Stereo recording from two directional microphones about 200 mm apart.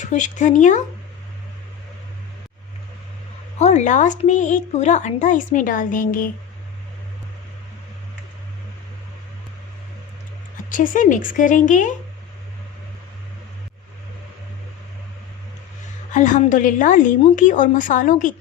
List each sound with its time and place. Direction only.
0.0 s a woman's voice: 35° left (ahead or behind)
3.6 s a woman's voice: 35° left (ahead or behind)
10.7 s a woman's voice: 40° left (ahead or behind)
16.1 s a woman's voice: 40° left (ahead or behind)